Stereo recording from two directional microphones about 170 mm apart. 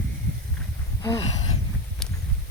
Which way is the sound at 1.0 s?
20° left (ahead or behind).